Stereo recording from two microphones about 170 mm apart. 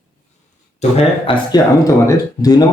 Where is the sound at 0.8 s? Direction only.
30° left (ahead or behind).